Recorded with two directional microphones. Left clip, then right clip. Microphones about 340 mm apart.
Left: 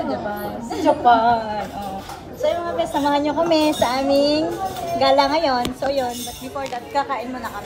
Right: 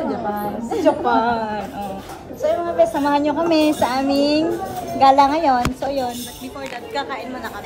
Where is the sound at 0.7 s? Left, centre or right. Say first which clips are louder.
Left 2 dB; centre.